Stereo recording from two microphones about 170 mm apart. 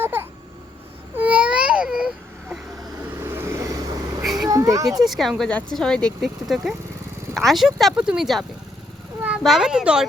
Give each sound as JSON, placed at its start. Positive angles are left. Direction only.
{"t": 0.0, "sound": "babbling", "side_deg": -15}
{"t": 1.1, "sound": "baby cry", "side_deg": -10}
{"t": 3.0, "sound": "vehicle", "side_deg": -15}
{"t": 4.4, "sound": "children playing", "side_deg": -20}
{"t": 4.9, "sound": "speech", "side_deg": 0}